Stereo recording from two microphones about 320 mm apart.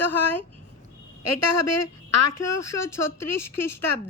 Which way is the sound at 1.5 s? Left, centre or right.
Left.